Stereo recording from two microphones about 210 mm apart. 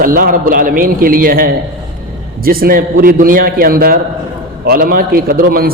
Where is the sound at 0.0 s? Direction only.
45° right (ahead or behind).